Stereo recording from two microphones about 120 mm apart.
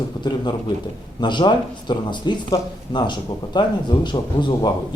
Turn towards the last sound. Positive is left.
turn(degrees=40)  # may be behind; listen again after turning